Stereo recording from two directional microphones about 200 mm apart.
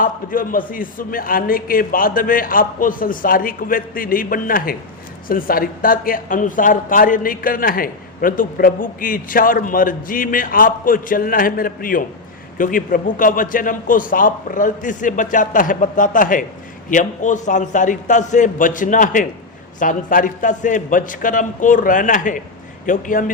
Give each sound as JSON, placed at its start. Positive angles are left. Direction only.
{"t": 0.0, "sound": "a woman's voice", "side_deg": 45}